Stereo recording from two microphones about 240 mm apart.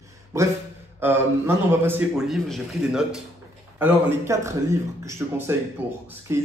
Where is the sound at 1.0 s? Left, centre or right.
Centre.